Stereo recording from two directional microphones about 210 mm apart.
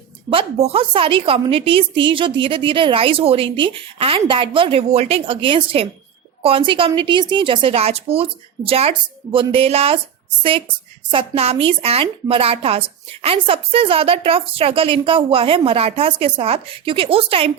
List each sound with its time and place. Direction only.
0.3 s a woman's voice: 25° right (ahead or behind)
11.1 s a woman's voice: 25° right (ahead or behind)